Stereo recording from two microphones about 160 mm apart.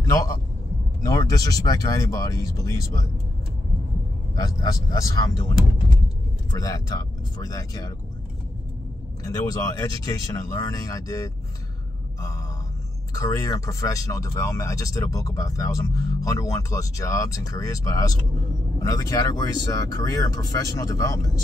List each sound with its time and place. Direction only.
0.0 s a man's voice: 20° left (ahead or behind)
4.4 s speech: 20° left (ahead or behind)
9.2 s speech: 20° left (ahead or behind)
13.1 s speech: 20° left (ahead or behind)